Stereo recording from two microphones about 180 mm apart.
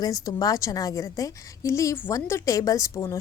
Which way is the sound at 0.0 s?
20° left (ahead or behind).